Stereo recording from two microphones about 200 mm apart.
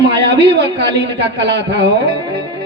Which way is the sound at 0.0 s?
60° right (ahead or behind).